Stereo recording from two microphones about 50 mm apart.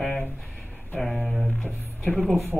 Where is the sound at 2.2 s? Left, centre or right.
Centre.